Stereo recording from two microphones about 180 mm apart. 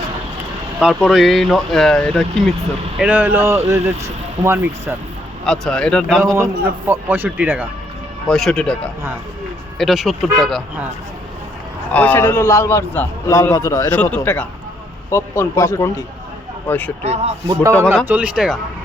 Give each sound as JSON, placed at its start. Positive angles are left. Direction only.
{"t": 0.8, "sound": "speech", "side_deg": -5}
{"t": 3.0, "sound": "a man's voice", "side_deg": -10}
{"t": 5.5, "sound": "speech", "side_deg": 5}
{"t": 6.3, "sound": "a man's voice", "side_deg": -15}
{"t": 8.3, "sound": "speech", "side_deg": 0}
{"t": 11.9, "sound": "a man's voice", "side_deg": 10}
{"t": 13.9, "sound": "a man's voice", "side_deg": 5}
{"t": 17.0, "sound": "speech", "side_deg": -35}
{"t": 17.5, "sound": "a man's voice", "side_deg": -15}